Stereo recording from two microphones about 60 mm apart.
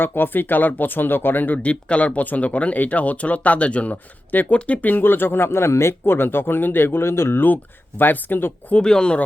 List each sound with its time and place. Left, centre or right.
0.0 s speech: left
1.7 s speech: centre; by 7.4 s left
7.4 s speech: left
8.7 s speech: centre